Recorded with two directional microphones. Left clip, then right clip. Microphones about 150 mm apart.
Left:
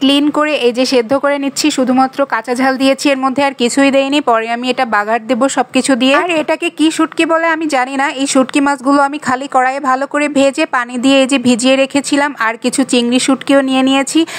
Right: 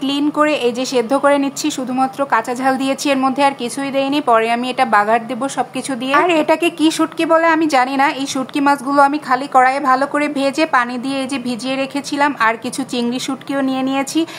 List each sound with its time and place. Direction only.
0.0 s a woman's voice: 35° left (ahead or behind)